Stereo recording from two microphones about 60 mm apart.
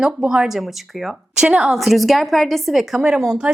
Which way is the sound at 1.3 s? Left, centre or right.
Centre.